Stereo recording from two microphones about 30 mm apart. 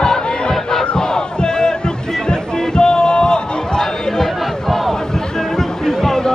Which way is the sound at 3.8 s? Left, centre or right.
Centre.